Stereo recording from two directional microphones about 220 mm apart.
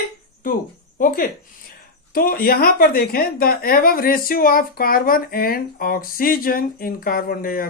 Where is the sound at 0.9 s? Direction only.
40° left (ahead or behind).